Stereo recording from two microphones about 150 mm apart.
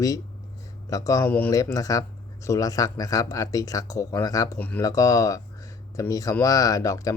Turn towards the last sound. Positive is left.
turn(degrees=20)  # may be behind; listen again after turning